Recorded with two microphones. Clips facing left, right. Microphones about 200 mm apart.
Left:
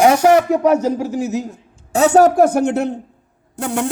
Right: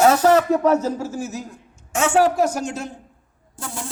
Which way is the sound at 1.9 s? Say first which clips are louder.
Left 6 dB; 40° left (ahead or behind).